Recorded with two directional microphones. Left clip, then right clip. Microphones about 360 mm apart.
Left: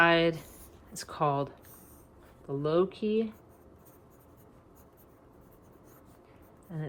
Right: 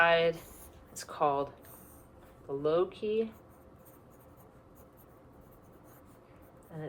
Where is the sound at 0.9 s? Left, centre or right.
Left.